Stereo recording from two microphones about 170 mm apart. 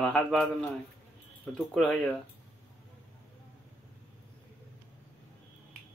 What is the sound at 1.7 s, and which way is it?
Speech, centre (ahead or behind).